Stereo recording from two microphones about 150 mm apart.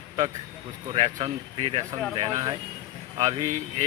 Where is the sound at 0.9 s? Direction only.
40° right (ahead or behind).